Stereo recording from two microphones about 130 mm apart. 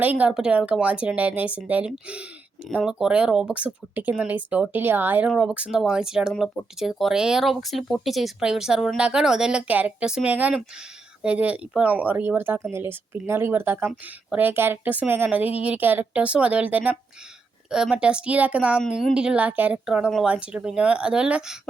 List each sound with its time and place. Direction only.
0.0 s a woman's voice: 10° right (ahead or behind)